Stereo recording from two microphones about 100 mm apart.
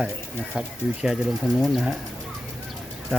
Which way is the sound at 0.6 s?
5° right (ahead or behind).